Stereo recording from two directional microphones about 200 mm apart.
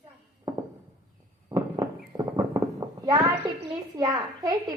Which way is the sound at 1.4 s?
20° right (ahead or behind).